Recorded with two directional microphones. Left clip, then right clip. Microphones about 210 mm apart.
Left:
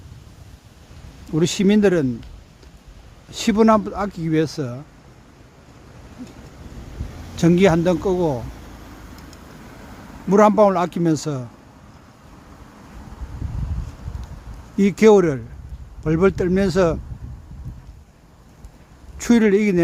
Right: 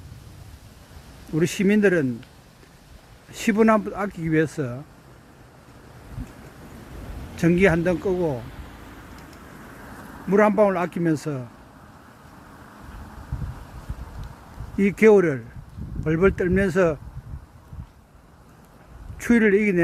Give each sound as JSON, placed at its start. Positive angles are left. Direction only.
{"t": 1.4, "sound": "speech", "side_deg": 20}
{"t": 3.5, "sound": "speech", "side_deg": 15}
{"t": 7.5, "sound": "speech", "side_deg": 25}
{"t": 8.0, "sound": "speech", "side_deg": 10}
{"t": 8.4, "sound": "a sound", "side_deg": 55}
{"t": 10.4, "sound": "speech", "side_deg": 20}
{"t": 14.8, "sound": "speech", "side_deg": 20}
{"t": 15.2, "sound": "speech", "side_deg": 10}
{"t": 19.2, "sound": "speech", "side_deg": 20}